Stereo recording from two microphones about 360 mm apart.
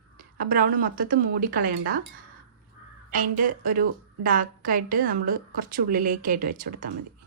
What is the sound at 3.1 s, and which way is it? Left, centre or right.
Speech, right.